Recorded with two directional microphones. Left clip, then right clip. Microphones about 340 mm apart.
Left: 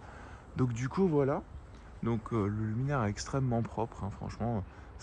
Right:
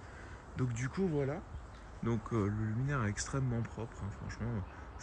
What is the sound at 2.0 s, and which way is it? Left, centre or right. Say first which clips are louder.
Speech: left 3 dB; centre.